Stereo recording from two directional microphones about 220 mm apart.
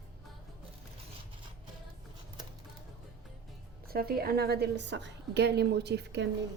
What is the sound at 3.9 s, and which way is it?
A woman's voice, 45° right (ahead or behind).